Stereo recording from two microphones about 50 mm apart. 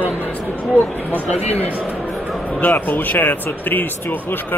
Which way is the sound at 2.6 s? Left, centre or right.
Left.